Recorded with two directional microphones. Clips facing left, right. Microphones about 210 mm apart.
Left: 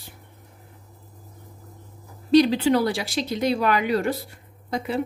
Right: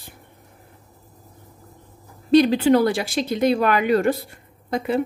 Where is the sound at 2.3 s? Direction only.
50° right (ahead or behind).